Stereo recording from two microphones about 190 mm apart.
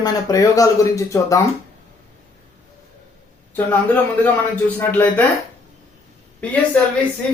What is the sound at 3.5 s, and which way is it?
Speech, 10° left (ahead or behind).